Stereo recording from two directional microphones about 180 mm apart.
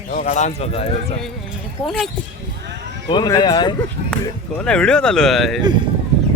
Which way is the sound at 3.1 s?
25° left (ahead or behind).